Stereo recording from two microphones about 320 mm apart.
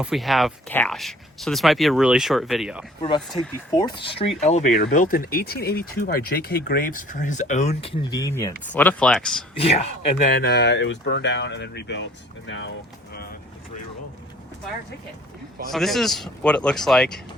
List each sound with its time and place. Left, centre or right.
0.0 s speech: centre
3.4 s speech: centre
9.6 s speech: centre; by 12.7 s left
15.7 s speech: centre